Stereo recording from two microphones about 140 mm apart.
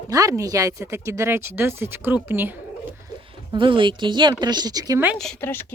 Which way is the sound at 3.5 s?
35° right (ahead or behind).